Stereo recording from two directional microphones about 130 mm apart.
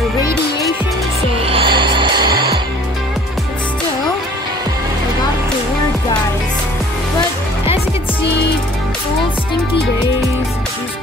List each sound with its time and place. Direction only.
1.3 s music: 45° right (ahead or behind)